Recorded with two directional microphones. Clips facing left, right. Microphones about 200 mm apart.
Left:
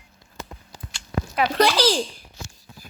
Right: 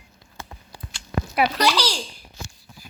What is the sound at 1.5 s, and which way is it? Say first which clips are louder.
Speech: left 4 dB; 50° left (ahead or behind).